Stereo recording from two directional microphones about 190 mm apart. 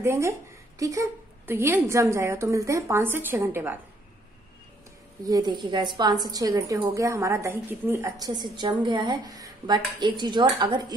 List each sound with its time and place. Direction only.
0.0 s a woman's voice: 15° right (ahead or behind)
5.2 s a woman's voice: 20° right (ahead or behind)